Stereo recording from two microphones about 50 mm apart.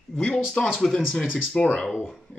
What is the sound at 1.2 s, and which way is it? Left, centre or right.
Speech, left.